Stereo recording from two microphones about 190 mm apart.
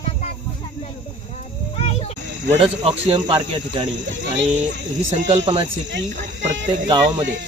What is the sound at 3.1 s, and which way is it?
Speech, 30° right (ahead or behind).